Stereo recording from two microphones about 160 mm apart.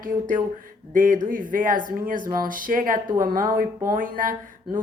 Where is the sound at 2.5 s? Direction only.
60° right (ahead or behind).